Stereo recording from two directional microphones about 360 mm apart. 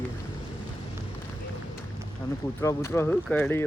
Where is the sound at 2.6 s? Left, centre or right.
Centre.